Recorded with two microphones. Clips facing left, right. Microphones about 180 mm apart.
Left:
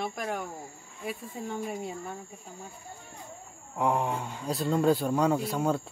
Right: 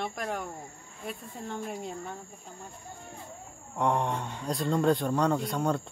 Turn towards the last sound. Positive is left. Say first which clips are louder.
# left 1 dB
turn(degrees=5)  # may be behind; listen again after turning